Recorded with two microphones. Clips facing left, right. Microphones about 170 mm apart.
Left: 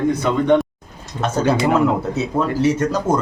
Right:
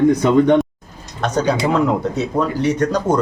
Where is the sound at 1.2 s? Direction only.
5° left (ahead or behind).